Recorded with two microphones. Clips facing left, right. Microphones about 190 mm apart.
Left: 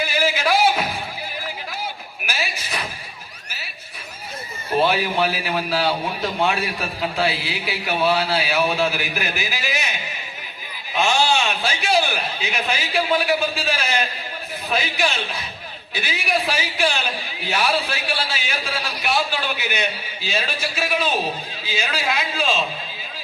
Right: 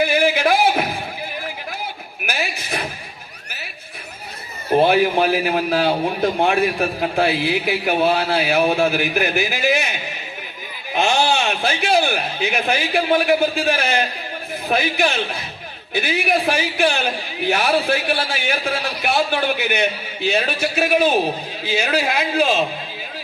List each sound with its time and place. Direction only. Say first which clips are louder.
0.0 s music: right 5 dB; 55° right (ahead or behind)
2.2 s a sound: right 3 dB; 60° right (ahead or behind)
4.9 s a man's voice: right 5 dB; 55° right (ahead or behind)
10.9 s a man's voice: right 2 dB; 60° right (ahead or behind)